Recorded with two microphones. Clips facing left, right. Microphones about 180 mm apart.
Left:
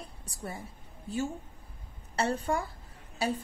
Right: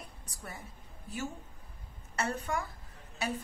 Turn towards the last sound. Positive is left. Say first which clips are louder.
# left 4 dB
turn(degrees=30)  # may be behind; listen again after turning